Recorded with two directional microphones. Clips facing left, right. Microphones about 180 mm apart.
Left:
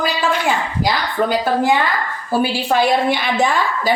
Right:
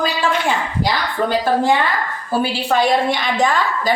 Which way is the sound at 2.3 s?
10° left (ahead or behind).